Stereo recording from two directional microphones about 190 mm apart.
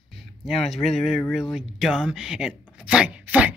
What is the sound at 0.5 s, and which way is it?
Speech, centre (ahead or behind).